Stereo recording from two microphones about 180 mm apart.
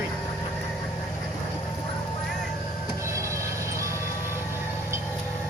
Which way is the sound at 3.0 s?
15° right (ahead or behind).